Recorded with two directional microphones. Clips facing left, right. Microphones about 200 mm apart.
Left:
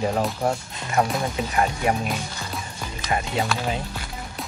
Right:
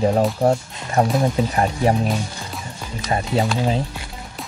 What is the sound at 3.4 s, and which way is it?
Speech, 20° right (ahead or behind).